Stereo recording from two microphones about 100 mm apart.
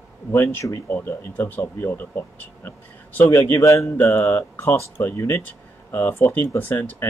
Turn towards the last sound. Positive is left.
turn(degrees=20)  # may be behind; listen again after turning